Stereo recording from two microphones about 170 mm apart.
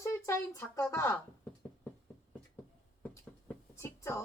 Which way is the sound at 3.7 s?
15° left (ahead or behind).